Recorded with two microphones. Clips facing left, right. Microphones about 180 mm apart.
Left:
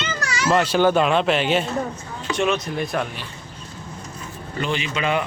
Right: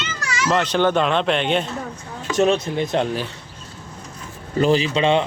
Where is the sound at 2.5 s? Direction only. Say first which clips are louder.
Right 3 dB; 25° right (ahead or behind).